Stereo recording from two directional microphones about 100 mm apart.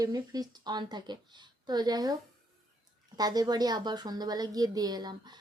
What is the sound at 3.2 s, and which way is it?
Speech, 40° right (ahead or behind).